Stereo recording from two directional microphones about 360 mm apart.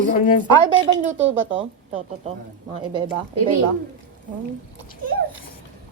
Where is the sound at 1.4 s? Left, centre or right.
Centre.